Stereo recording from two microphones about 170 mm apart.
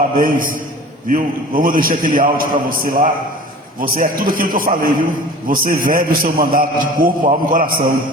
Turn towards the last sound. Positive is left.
turn(degrees=-55)  # may be behind; listen again after turning